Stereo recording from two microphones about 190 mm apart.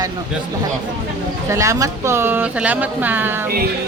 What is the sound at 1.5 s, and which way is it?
A woman's voice, 15° right (ahead or behind).